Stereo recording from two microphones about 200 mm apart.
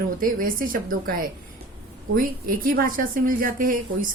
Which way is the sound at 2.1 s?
45° right (ahead or behind).